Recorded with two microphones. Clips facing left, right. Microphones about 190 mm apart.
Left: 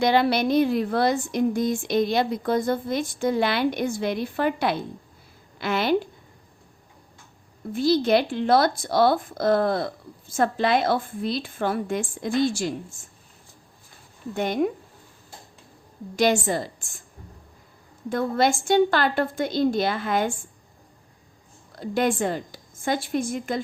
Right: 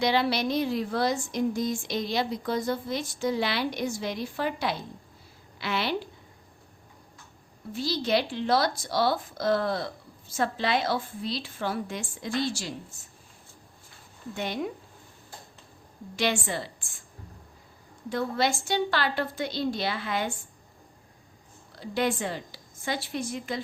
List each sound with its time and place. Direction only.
0.0 s a woman's voice: 50° left (ahead or behind)
7.7 s speech: 55° left (ahead or behind)
14.3 s speech: 50° left (ahead or behind)
16.1 s speech: 45° left (ahead or behind)
18.1 s speech: 50° left (ahead or behind)
21.8 s speech: 50° left (ahead or behind)